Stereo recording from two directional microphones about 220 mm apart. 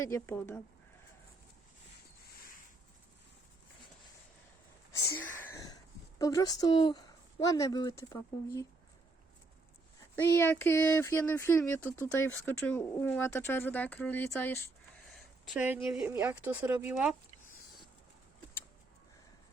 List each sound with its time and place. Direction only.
0.0 s speech: 10° left (ahead or behind)
4.9 s speech: 15° left (ahead or behind)
5.4 s wheeze: 10° left (ahead or behind)
6.1 s speech: 15° left (ahead or behind)
10.2 s speech: 10° left (ahead or behind)
15.1 s speech: centre (ahead or behind)